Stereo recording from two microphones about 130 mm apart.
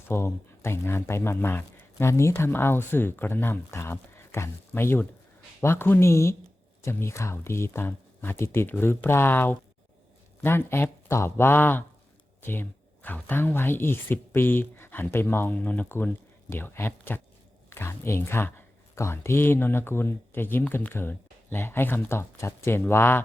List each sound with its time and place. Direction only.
0.1 s speech: 20° left (ahead or behind)